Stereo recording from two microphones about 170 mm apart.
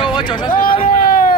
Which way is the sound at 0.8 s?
60° left (ahead or behind).